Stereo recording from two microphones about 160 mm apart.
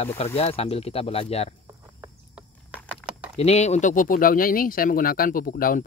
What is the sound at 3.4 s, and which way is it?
Speech, 45° left (ahead or behind).